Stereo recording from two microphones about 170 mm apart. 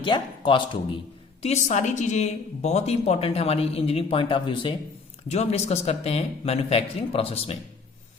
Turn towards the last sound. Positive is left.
turn(degrees=35)  # may be behind; listen again after turning